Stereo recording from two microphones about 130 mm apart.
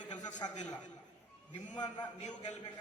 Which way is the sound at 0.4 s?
30° left (ahead or behind).